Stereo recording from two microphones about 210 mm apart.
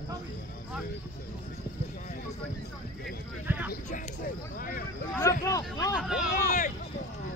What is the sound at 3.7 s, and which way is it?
Speech, 40° left (ahead or behind).